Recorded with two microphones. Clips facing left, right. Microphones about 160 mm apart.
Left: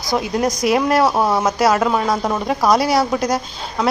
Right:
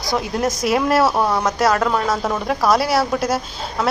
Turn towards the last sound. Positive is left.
turn(degrees=-5)  # may be behind; listen again after turning